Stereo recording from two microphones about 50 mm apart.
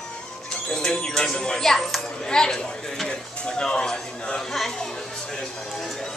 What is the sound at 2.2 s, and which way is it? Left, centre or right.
Speech, centre.